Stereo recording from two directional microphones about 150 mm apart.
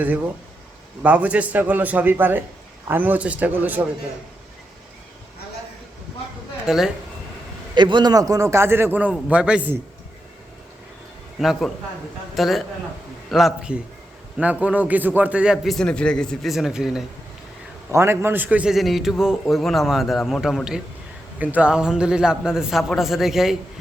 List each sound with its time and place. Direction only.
1.0 s a man's voice: 10° right (ahead or behind)
6.7 s a man's voice: 5° right (ahead or behind)
7.8 s a man's voice: 30° right (ahead or behind); by 9.7 s 10° right (ahead or behind)
11.3 s a man's voice: centre (ahead or behind)
17.9 s a man's voice: 15° right (ahead or behind); by 23.6 s centre (ahead or behind)